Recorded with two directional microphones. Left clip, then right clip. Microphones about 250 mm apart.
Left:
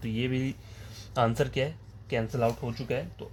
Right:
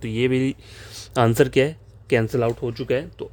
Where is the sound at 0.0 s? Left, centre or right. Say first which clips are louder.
Right 10 dB; right.